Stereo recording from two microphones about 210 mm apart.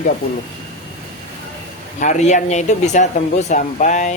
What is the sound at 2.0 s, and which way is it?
Speech, 35° left (ahead or behind).